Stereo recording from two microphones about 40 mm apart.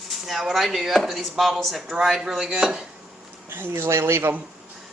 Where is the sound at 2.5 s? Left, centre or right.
Right.